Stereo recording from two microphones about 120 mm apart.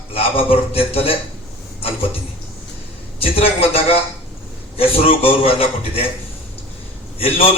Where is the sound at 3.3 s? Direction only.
55° left (ahead or behind).